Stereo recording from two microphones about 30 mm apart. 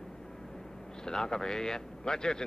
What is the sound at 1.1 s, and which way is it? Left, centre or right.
Speech, centre.